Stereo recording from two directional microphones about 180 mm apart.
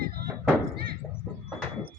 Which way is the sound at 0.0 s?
60° right (ahead or behind).